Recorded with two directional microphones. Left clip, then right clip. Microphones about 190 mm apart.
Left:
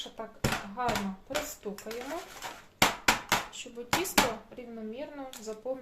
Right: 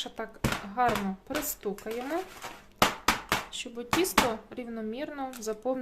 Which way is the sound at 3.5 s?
50° right (ahead or behind).